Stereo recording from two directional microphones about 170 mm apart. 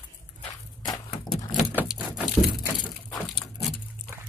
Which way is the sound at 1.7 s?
10° right (ahead or behind).